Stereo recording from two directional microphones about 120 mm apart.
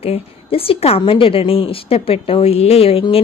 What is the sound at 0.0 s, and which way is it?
A woman's voice, 55° left (ahead or behind).